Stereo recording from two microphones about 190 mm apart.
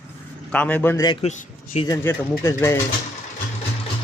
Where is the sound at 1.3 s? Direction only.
40° left (ahead or behind).